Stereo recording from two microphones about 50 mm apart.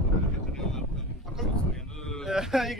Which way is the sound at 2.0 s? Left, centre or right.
Centre.